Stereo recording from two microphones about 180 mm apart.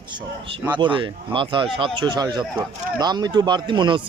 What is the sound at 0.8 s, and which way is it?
Speech, 25° right (ahead or behind).